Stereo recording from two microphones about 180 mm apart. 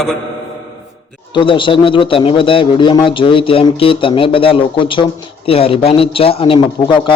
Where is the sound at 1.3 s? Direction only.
25° left (ahead or behind).